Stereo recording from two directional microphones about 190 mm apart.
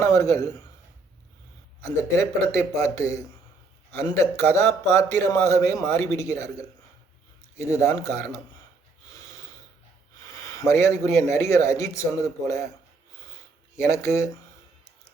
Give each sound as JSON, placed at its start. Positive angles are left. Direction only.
{"t": 0.0, "sound": "a man's voice", "side_deg": 15}
{"t": 1.8, "sound": "a man's voice", "side_deg": 15}
{"t": 10.6, "sound": "a man's voice", "side_deg": 15}
{"t": 13.7, "sound": "a man's voice", "side_deg": 15}